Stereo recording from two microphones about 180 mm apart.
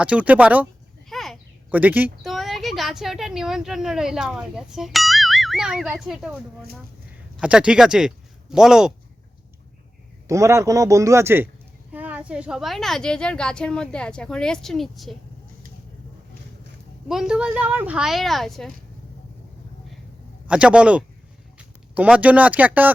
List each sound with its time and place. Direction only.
0.0 s a man's voice: 5° right (ahead or behind)
1.1 s a sound: centre (ahead or behind)
1.7 s a man's voice: 10° right (ahead or behind)
2.3 s speech: centre (ahead or behind)
10.2 s a man's voice: 15° right (ahead or behind); by 15.1 s centre (ahead or behind)
17.1 s a woman's voice: 5° right (ahead or behind)
20.5 s a man's voice: 5° right (ahead or behind)